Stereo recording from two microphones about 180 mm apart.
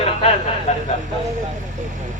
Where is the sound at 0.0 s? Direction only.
35° left (ahead or behind).